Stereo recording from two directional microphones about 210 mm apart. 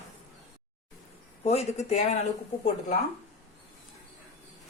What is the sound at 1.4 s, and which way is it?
Speech, 30° left (ahead or behind).